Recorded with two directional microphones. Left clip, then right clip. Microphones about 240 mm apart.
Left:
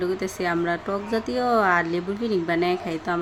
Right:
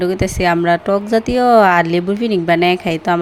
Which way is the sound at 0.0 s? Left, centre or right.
Right.